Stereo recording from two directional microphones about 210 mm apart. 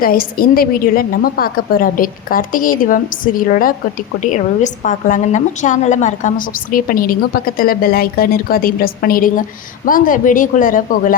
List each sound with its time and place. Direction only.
0.0 s a woman's voice: 45° left (ahead or behind)